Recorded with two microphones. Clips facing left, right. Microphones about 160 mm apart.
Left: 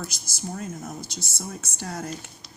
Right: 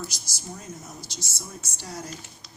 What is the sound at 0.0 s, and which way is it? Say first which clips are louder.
Speech: left 3 dB; 55° left (ahead or behind).